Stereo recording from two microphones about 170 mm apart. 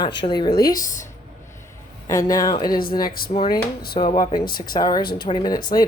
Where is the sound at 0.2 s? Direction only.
25° left (ahead or behind).